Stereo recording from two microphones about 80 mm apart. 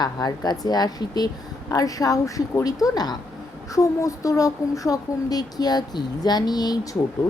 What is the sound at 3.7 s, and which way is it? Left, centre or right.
Speech, left.